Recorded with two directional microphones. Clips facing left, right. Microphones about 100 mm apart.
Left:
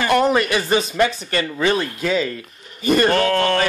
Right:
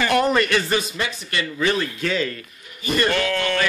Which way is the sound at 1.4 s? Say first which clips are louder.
Left 2 dB; 25° left (ahead or behind).